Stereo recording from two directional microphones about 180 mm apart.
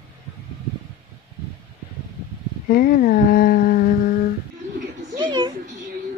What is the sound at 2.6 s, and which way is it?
Speech, 50° left (ahead or behind).